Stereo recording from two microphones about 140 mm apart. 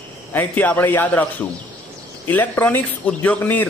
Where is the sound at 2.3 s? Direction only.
15° left (ahead or behind).